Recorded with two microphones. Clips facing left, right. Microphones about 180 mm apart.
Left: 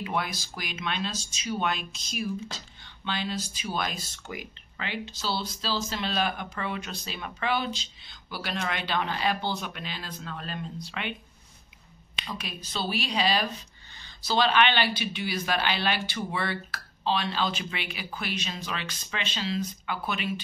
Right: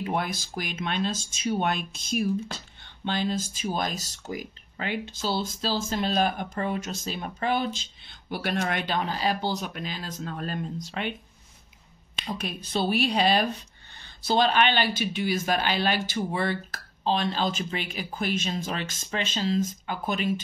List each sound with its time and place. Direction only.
0.0 s speech: 45° right (ahead or behind)
12.4 s speech: 55° right (ahead or behind)